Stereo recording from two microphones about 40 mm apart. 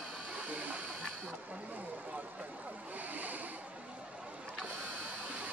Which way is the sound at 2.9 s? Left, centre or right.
Right.